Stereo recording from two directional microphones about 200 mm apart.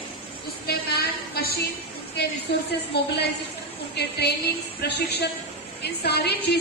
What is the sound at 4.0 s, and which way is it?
A woman's voice, 55° left (ahead or behind).